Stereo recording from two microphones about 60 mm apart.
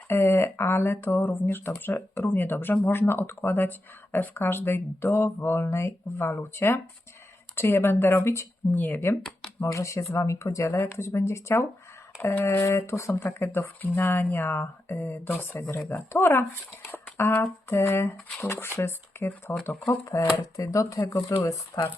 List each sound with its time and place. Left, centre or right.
0.1 s speech: left
8.7 s speech: left
9.6 s speech: left
10.8 s speech: left
13.1 s speech: left
20.4 s speech: left